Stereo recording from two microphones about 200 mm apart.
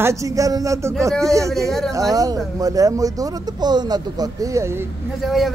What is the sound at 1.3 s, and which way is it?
Speech, 15° right (ahead or behind).